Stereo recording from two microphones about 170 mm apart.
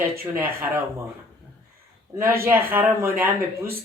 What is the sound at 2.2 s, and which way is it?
Speech, 15° right (ahead or behind).